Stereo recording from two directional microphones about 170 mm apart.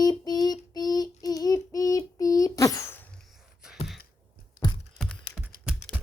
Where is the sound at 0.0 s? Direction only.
20° left (ahead or behind).